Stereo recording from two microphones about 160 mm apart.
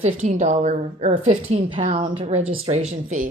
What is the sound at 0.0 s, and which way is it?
A woman's voice, 50° right (ahead or behind).